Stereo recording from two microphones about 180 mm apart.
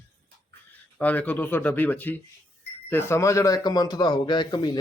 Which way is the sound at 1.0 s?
10° left (ahead or behind).